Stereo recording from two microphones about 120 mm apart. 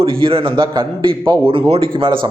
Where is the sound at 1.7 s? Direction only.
45° right (ahead or behind).